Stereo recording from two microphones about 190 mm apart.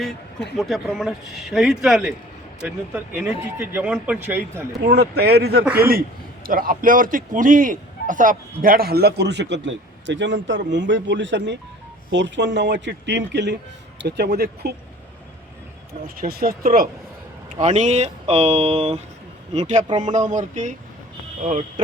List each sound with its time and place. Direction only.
0.5 s speech: centre (ahead or behind)
4.8 s a man's voice: 60° right (ahead or behind)
16.0 s a man's voice: 50° right (ahead or behind)
17.6 s speech: 40° right (ahead or behind)